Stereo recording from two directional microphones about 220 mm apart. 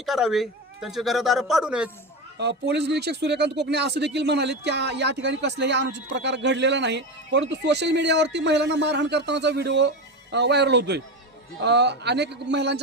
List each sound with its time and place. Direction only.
0.0 s speech: centre (ahead or behind)
2.4 s speech: 50° right (ahead or behind)